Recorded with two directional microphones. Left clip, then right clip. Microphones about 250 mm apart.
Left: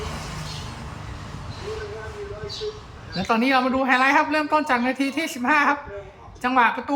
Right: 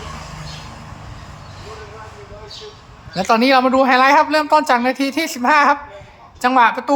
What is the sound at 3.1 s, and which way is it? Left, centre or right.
A woman's voice, right.